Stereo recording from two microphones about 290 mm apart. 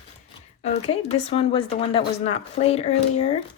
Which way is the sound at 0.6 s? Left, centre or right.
Left.